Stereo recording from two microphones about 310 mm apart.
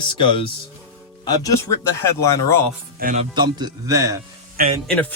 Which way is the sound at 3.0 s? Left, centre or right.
Right.